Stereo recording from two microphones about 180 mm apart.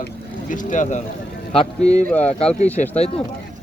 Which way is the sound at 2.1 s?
10° left (ahead or behind).